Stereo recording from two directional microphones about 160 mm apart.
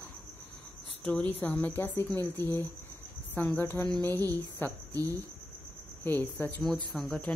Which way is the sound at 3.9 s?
20° right (ahead or behind).